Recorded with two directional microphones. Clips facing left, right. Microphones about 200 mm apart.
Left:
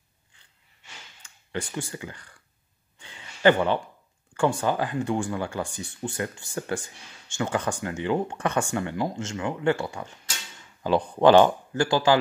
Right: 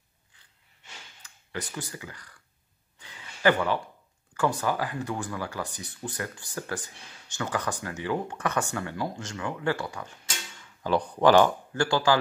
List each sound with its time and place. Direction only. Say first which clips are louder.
1.2 s speech: left 4 dB; 30° left (ahead or behind)
3.0 s a sound: left 4 dB; 25° left (ahead or behind)
4.3 s speech: left 3 dB; 30° left (ahead or behind)